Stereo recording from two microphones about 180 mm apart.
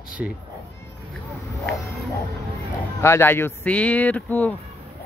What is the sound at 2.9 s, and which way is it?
Speech, 15° left (ahead or behind).